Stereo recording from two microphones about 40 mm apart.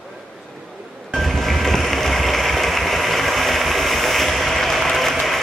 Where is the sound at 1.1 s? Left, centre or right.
Centre.